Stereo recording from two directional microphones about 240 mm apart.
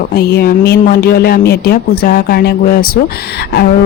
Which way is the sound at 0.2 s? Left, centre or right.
Left.